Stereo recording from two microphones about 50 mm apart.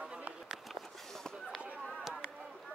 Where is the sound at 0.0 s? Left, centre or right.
Right.